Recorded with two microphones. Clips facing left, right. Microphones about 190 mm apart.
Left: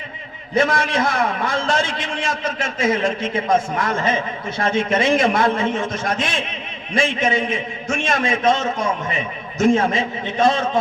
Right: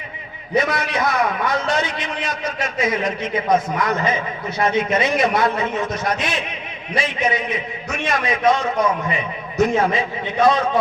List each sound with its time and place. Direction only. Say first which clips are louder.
0.8 s a man's voice: left 1 dB; 25° left (ahead or behind)